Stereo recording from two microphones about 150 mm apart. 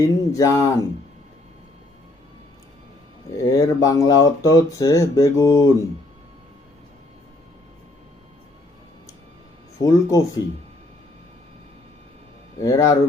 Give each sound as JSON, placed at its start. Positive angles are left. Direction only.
{"t": 0.0, "sound": "speech", "side_deg": 20}
{"t": 3.3, "sound": "speech", "side_deg": 20}
{"t": 9.8, "sound": "speech", "side_deg": 20}
{"t": 12.6, "sound": "speech", "side_deg": 25}